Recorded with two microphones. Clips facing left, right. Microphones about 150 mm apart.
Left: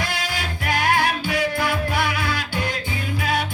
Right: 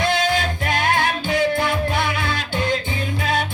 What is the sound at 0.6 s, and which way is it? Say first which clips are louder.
Music: left 4 dB; 25° right (ahead or behind).